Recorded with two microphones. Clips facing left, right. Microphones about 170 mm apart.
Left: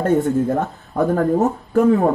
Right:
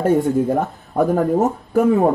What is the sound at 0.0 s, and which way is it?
Speech, 10° right (ahead or behind).